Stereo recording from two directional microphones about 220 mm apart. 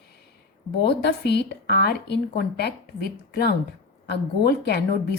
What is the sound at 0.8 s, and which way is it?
A woman's voice, 45° left (ahead or behind).